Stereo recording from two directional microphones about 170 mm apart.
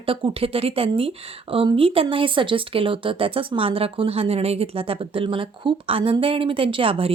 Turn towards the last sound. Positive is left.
turn(degrees=-35)  # may be behind; listen again after turning